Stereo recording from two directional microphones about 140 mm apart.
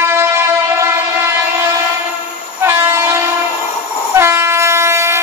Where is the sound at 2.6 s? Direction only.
15° right (ahead or behind).